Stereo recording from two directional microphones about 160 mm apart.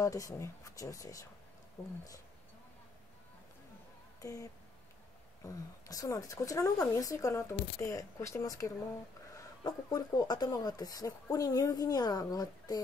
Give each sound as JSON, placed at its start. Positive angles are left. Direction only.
{"t": 0.0, "sound": "speech", "side_deg": 20}
{"t": 4.2, "sound": "a sound", "side_deg": 20}
{"t": 5.4, "sound": "speech", "side_deg": 20}